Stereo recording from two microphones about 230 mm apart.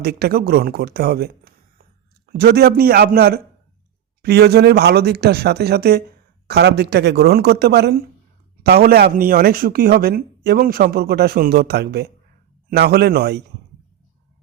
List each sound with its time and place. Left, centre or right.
0.0 s speech: right